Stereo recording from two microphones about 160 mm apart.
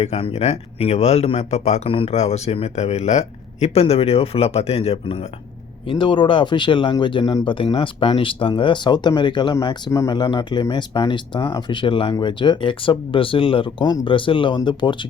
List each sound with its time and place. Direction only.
0.0 s speech: 40° left (ahead or behind)